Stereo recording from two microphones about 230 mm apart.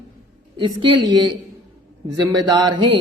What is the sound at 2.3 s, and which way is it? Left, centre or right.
Speech, centre.